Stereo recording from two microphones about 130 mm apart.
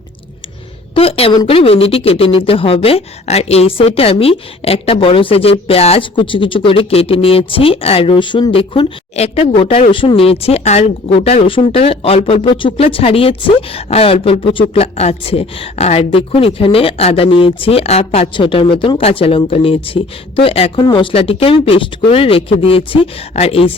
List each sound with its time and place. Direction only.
0.9 s speech: 50° left (ahead or behind)